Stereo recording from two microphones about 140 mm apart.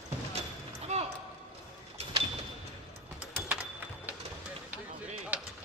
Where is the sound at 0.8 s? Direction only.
50° right (ahead or behind).